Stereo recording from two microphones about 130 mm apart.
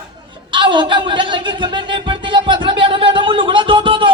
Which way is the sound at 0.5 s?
35° right (ahead or behind).